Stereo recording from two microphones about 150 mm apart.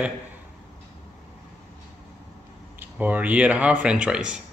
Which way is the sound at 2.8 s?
10° right (ahead or behind).